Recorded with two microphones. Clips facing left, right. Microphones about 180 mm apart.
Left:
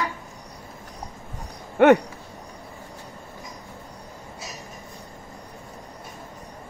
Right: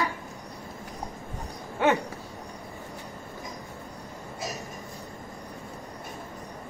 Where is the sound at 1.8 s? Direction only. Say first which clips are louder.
Left 9 dB; 65° left (ahead or behind).